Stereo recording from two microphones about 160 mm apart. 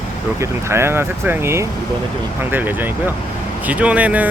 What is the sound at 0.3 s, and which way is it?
Speech, 15° right (ahead or behind).